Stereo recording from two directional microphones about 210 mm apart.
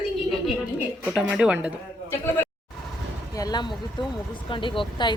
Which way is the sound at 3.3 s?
20° left (ahead or behind).